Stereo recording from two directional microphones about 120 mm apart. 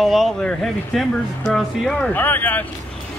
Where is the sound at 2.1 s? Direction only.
15° left (ahead or behind).